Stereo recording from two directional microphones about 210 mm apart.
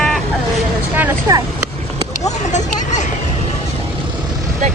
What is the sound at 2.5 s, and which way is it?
Vehicle, 35° left (ahead or behind).